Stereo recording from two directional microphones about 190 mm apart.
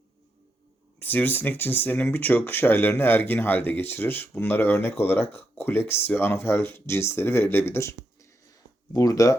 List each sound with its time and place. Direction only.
0.9 s speech: 10° left (ahead or behind)